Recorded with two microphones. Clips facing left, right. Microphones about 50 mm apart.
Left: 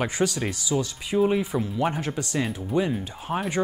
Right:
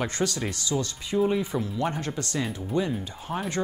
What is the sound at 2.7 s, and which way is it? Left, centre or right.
Speech, centre.